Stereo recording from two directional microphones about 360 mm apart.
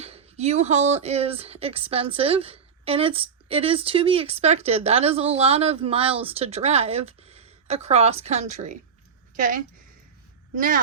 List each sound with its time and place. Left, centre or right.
0.0 s a woman's voice: centre